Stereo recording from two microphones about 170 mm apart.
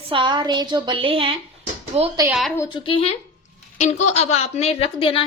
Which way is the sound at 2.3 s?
Centre (ahead or behind).